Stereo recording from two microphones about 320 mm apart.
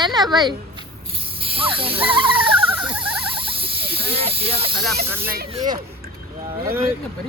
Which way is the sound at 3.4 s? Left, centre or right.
Centre.